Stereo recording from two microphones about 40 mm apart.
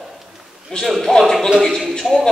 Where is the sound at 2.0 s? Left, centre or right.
Centre.